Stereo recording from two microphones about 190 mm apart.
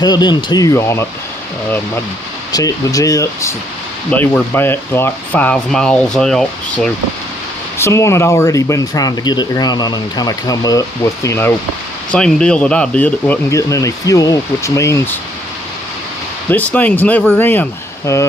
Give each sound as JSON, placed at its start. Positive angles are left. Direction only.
{"t": 0.0, "sound": "speech", "side_deg": 20}
{"t": 2.5, "sound": "speech", "side_deg": 20}
{"t": 7.8, "sound": "speech", "side_deg": 15}
{"t": 16.5, "sound": "speech", "side_deg": 10}